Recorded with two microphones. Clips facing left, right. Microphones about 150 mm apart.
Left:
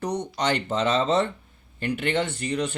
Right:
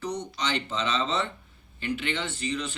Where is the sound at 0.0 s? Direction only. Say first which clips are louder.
Left 4 dB; 55° left (ahead or behind).